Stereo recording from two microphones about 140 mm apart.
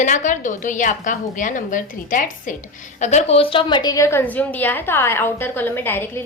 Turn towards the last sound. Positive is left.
turn(degrees=15)  # may be behind; listen again after turning